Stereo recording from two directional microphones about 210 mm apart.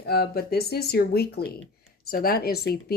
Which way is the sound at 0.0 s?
50° left (ahead or behind).